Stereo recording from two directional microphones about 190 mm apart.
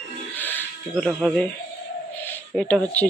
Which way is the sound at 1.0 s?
Centre (ahead or behind).